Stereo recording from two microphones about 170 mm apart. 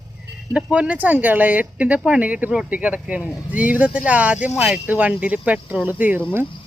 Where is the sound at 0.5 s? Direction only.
5° right (ahead or behind).